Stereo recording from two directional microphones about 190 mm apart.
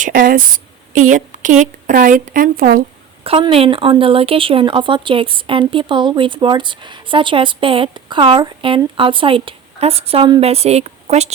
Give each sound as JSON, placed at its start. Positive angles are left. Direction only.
{"t": 0.0, "sound": "a woman's voice", "side_deg": -45}
{"t": 3.2, "sound": "speech", "side_deg": -30}